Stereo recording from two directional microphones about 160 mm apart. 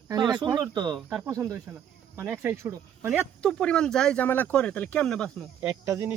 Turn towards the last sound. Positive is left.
turn(degrees=-20)  # may be behind; listen again after turning